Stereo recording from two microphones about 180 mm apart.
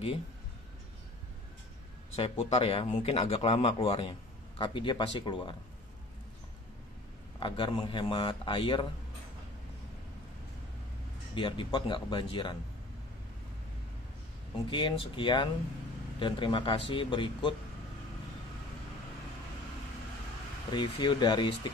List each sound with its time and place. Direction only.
2.1 s speech: 35° left (ahead or behind)
7.3 s a man's voice: 25° left (ahead or behind)
11.3 s a man's voice: 30° left (ahead or behind)
14.7 s a man's voice: 25° left (ahead or behind)
20.7 s a man's voice: 25° left (ahead or behind)